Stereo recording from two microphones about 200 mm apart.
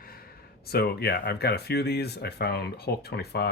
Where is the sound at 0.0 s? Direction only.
50° left (ahead or behind).